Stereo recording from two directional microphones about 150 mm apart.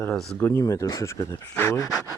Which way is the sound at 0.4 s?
20° left (ahead or behind).